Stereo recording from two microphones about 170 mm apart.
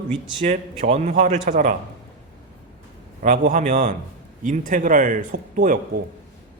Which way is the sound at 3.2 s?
50° right (ahead or behind).